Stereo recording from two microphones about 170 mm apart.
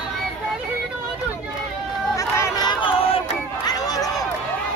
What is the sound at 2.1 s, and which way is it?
Crowd, 20° left (ahead or behind).